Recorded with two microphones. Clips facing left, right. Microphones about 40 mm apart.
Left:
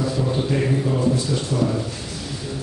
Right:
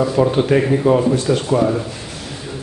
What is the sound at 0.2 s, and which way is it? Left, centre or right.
Speech, right.